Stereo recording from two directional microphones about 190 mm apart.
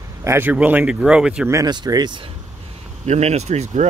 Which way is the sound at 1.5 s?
20° right (ahead or behind).